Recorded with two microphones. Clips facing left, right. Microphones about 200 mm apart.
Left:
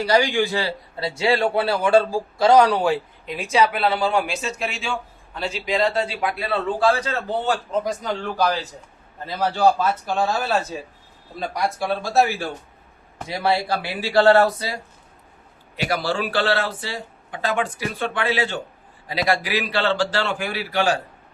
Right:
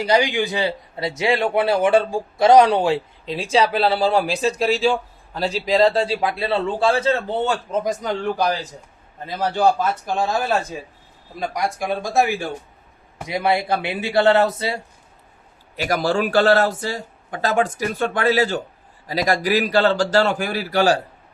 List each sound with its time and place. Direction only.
0.0 s a man's voice: 20° right (ahead or behind)
15.7 s speech: 45° right (ahead or behind)